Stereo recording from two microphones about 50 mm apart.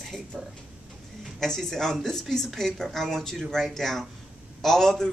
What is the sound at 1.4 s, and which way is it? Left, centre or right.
Speech, centre.